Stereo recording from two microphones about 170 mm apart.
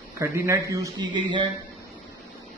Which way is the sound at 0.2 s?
15° right (ahead or behind).